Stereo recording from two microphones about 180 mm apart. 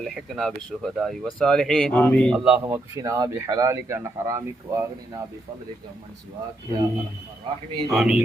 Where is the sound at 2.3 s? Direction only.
5° right (ahead or behind).